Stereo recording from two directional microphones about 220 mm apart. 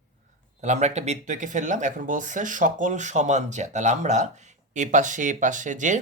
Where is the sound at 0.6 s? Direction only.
30° right (ahead or behind).